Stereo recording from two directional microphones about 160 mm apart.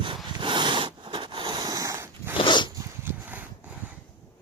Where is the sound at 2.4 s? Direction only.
30° left (ahead or behind).